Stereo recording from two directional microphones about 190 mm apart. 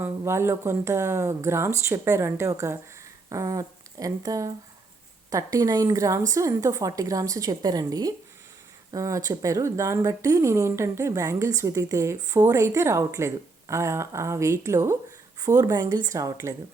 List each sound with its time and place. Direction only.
0.0 s speech: 15° right (ahead or behind)